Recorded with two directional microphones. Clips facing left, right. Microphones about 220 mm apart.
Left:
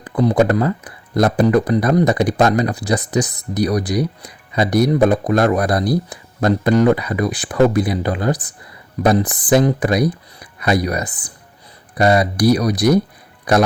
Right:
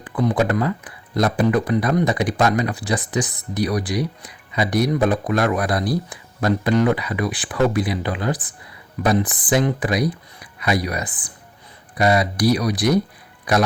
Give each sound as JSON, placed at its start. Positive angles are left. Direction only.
{"t": 0.0, "sound": "speech", "side_deg": 40}